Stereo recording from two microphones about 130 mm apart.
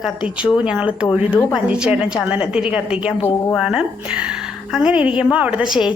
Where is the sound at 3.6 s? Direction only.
5° right (ahead or behind).